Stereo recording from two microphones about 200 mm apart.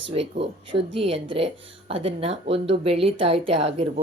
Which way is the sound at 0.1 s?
30° right (ahead or behind).